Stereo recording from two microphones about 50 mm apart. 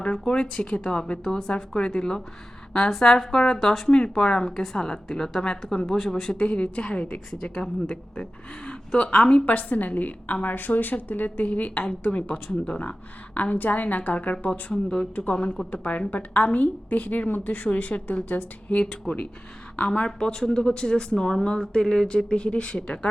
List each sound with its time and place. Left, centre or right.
0.0 s speech: centre
6.3 s a woman's voice: left
12.3 s a woman's voice: centre
14.7 s speech: centre
15.1 s a woman's voice: left